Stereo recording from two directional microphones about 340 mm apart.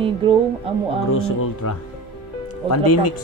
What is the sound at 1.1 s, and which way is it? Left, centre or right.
Speech, left.